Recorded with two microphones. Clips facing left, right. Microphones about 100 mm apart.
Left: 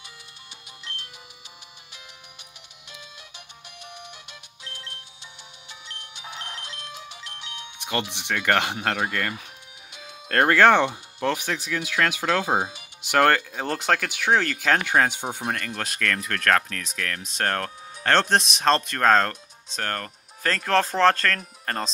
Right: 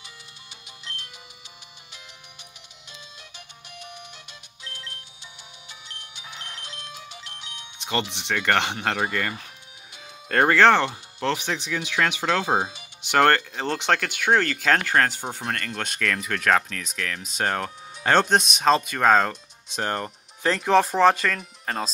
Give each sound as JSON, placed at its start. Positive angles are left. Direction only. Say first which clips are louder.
{"t": 0.7, "sound": "music", "louder": "even", "side_deg": 0}
{"t": 2.9, "sound": "music", "louder": "left 1 dB", "side_deg": 10}
{"t": 5.7, "sound": "music", "louder": "left 2 dB", "side_deg": -5}
{"t": 7.8, "sound": "speech", "louder": "right 1 dB", "side_deg": 10}
{"t": 19.8, "sound": "speech", "louder": "right 3 dB", "side_deg": -15}